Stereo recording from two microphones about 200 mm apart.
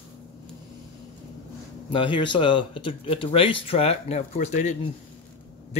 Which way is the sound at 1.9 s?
25° left (ahead or behind).